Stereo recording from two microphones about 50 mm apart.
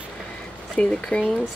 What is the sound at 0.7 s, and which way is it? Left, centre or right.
Speech, left.